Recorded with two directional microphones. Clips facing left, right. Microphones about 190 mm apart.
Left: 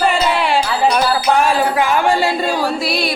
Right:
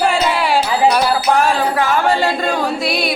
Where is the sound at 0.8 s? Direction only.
5° right (ahead or behind).